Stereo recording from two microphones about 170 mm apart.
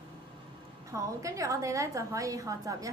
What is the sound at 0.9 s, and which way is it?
A woman's voice, 20° right (ahead or behind).